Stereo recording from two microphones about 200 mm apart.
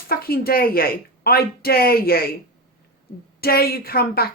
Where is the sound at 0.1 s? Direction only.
50° left (ahead or behind).